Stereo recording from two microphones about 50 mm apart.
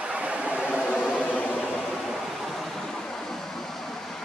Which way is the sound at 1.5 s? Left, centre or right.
Centre.